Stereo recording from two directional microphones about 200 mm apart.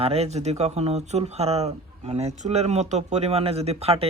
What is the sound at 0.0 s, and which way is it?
A man's voice, 30° right (ahead or behind).